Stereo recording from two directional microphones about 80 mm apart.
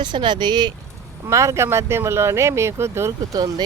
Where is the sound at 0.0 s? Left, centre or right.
Right.